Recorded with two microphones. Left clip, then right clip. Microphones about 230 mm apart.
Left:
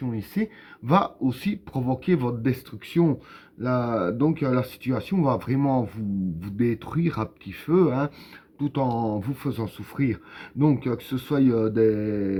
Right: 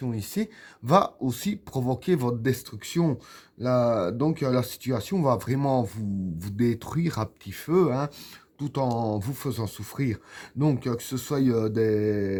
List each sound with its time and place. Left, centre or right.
0.0 s speech: right